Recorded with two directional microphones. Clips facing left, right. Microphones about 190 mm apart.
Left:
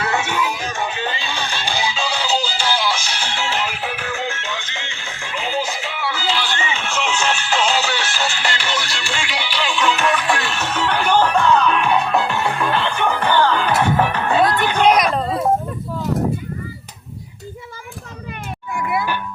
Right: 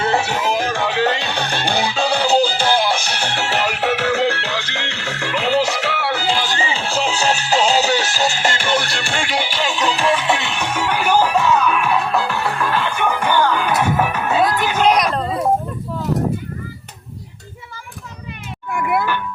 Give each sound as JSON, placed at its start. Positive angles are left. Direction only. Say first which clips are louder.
{"t": 0.0, "sound": "music", "louder": "right 3 dB", "side_deg": -35}
{"t": 0.7, "sound": "music", "louder": "right 6 dB", "side_deg": -70}
{"t": 18.7, "sound": "music", "louder": "right 3 dB", "side_deg": -60}